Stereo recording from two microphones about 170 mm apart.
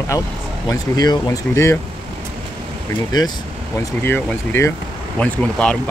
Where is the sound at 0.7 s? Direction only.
20° left (ahead or behind).